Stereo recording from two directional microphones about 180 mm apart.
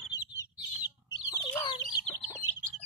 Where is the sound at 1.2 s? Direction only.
15° left (ahead or behind).